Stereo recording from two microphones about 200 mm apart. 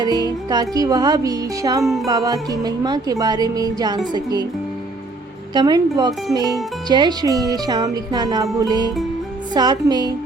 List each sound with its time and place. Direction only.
0.0 s music: 20° right (ahead or behind)
1.8 s music: centre (ahead or behind)
2.0 s speech: 15° right (ahead or behind)
5.5 s speech: 20° right (ahead or behind)